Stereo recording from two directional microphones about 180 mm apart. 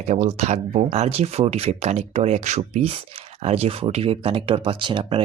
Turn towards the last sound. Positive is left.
turn(degrees=-25)  # may be behind; listen again after turning